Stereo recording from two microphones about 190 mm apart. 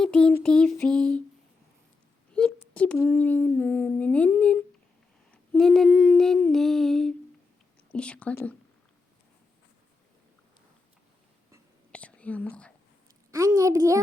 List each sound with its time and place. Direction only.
0.0 s female singing: 5° left (ahead or behind)
2.3 s speech: 5° left (ahead or behind)
5.3 s female singing: 5° left (ahead or behind)
7.9 s speech: 5° left (ahead or behind)
11.9 s whispering: 5° left (ahead or behind)
13.3 s a child's voice: 15° right (ahead or behind)